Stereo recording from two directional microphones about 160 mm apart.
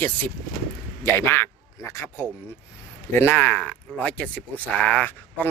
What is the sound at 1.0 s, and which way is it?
Speech, 15° left (ahead or behind).